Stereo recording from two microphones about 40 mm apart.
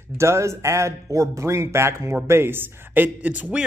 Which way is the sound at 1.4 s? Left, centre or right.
Right.